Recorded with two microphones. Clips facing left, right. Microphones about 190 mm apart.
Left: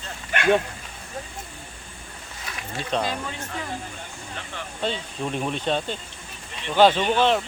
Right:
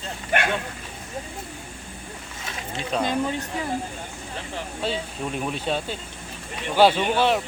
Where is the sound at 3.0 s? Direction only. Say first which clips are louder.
Right 5 dB; 20° right (ahead or behind).